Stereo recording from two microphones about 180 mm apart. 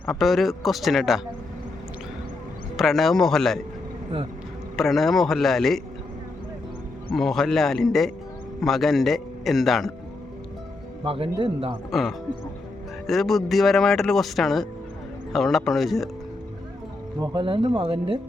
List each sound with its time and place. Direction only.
0.0 s speech: centre (ahead or behind)
2.7 s speech: centre (ahead or behind)
4.8 s speech: centre (ahead or behind)
7.2 s speech: centre (ahead or behind)
11.0 s speech: 30° right (ahead or behind)
11.9 s speech: centre (ahead or behind)
17.2 s speech: 25° right (ahead or behind)